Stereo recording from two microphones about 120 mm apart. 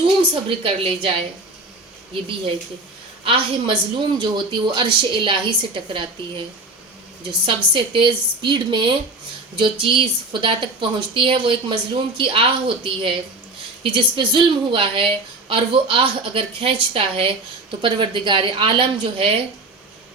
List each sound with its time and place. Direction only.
0.2 s speech: 45° right (ahead or behind)
3.2 s speech: 45° right (ahead or behind)